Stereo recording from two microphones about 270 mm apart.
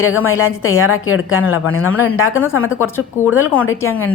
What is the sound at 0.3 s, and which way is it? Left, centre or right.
A woman's voice, left.